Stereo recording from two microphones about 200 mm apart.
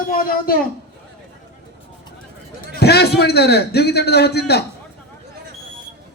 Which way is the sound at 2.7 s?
55° left (ahead or behind).